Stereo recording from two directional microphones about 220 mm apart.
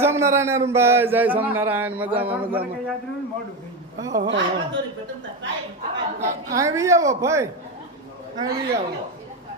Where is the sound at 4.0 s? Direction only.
15° right (ahead or behind).